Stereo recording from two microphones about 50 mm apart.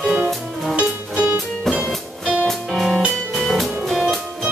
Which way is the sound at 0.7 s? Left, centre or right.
Right.